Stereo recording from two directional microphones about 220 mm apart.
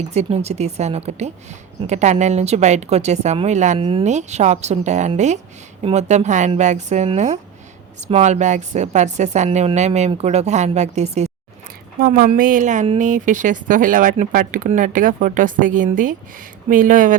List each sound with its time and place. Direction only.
0.1 s a woman's voice: 30° right (ahead or behind)
11.9 s a woman's voice: 40° right (ahead or behind)